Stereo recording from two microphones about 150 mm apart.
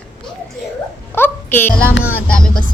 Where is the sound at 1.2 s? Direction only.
15° left (ahead or behind).